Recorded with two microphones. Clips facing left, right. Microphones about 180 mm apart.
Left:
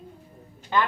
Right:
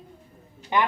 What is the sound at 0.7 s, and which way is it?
Speech, 15° right (ahead or behind).